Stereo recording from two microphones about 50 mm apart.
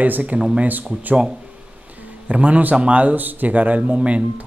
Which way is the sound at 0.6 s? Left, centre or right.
Right.